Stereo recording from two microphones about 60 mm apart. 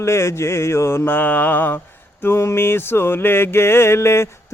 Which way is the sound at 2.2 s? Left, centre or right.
Left.